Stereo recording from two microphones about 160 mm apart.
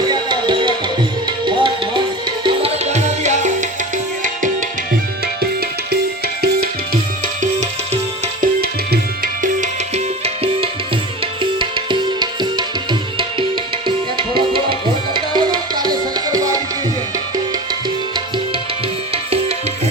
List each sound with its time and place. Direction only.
0.0 s music: 25° right (ahead or behind); by 4.3 s 50° right (ahead or behind)
5.2 s music: 75° right (ahead or behind)
8.4 s tabla: 70° right (ahead or behind); by 10.7 s 40° right (ahead or behind)
11.6 s music: 30° right (ahead or behind)
19.1 s music: 40° right (ahead or behind)